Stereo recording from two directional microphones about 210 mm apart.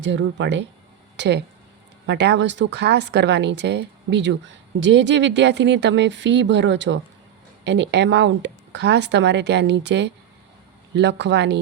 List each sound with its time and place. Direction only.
0.0 s speech: 60° right (ahead or behind)